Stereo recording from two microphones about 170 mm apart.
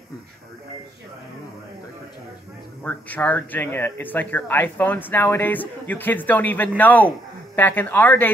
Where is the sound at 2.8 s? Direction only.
10° left (ahead or behind).